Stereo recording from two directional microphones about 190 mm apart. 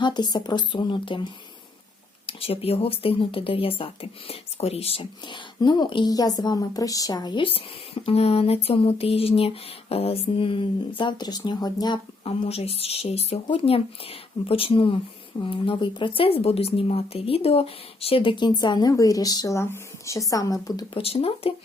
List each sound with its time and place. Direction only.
0.0 s speech: 25° left (ahead or behind)
8.0 s a sound: 30° left (ahead or behind)
15.4 s speech: 25° left (ahead or behind)